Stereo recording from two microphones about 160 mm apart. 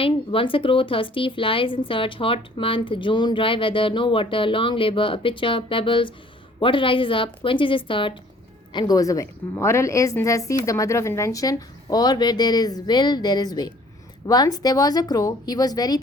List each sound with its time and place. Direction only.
0.0 s a woman's voice: 35° left (ahead or behind)